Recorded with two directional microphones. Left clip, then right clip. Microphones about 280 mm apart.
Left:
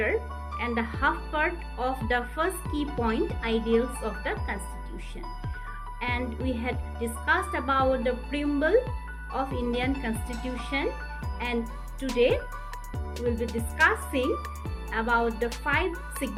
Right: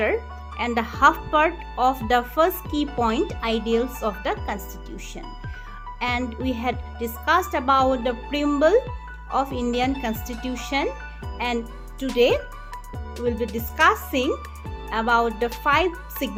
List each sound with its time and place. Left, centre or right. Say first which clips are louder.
0.0 s speech: right 4 dB; right
6.0 s speech: right 6 dB; right
13.7 s speech: right 5 dB; right